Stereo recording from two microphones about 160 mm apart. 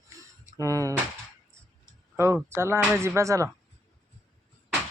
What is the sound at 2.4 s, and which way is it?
Speech, 15° right (ahead or behind).